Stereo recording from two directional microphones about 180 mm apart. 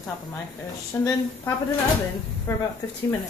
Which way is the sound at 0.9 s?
10° left (ahead or behind).